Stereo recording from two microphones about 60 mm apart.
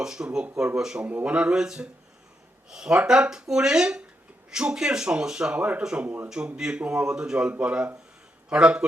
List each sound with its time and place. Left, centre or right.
0.0 s speech: centre
1.0 s speech: right